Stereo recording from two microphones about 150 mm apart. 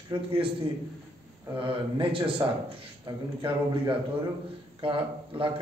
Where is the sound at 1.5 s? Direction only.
35° right (ahead or behind).